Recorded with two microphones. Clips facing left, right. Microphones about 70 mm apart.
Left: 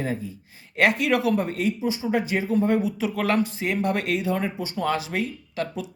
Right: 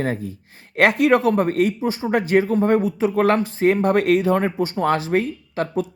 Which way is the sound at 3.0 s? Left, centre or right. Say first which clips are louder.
Right 6 dB; right.